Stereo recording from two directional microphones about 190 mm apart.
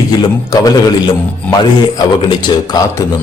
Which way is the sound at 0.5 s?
20° left (ahead or behind).